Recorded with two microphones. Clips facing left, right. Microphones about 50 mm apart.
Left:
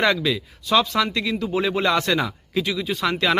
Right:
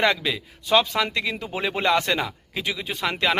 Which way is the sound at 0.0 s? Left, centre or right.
Centre.